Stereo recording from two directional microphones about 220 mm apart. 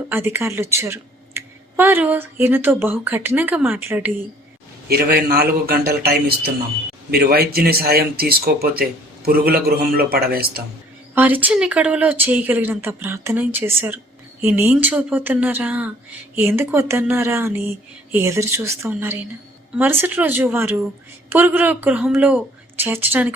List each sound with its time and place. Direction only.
0.1 s speech: 10° right (ahead or behind)
4.9 s speech: 45° right (ahead or behind)
11.1 s speech: 10° right (ahead or behind)